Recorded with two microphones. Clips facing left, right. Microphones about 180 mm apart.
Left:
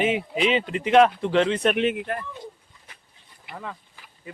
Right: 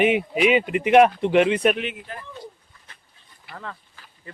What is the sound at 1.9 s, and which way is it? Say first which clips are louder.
Speech: left 9 dB; 65° left (ahead or behind).